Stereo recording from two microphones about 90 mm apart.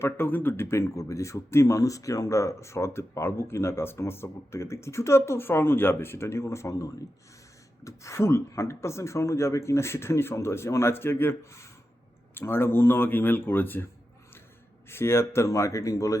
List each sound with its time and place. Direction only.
0.0 s speech: 25° left (ahead or behind)
14.8 s speech: 30° left (ahead or behind)